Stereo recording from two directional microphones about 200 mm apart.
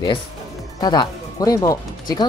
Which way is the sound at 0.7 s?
20° left (ahead or behind).